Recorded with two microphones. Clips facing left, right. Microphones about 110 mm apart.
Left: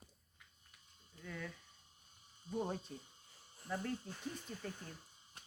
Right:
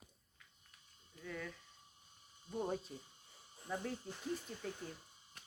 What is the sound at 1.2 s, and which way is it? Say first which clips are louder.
Speech: right 1 dB; centre (ahead or behind).